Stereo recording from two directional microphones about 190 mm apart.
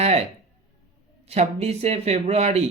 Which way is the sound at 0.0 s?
35° right (ahead or behind).